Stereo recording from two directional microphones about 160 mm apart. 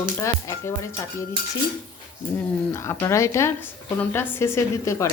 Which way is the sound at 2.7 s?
15° left (ahead or behind).